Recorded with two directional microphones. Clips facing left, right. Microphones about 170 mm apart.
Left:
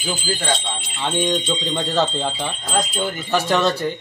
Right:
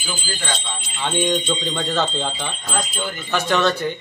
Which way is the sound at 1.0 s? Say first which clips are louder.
Even; centre (ahead or behind).